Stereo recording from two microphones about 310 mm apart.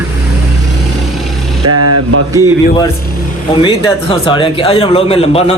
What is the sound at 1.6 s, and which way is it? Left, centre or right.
Speech, right.